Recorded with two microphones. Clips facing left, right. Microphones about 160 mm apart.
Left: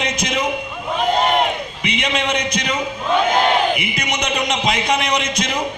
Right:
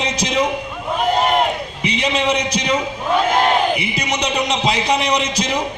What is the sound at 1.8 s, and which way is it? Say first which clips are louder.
A man's voice: right 3 dB; 30° right (ahead or behind).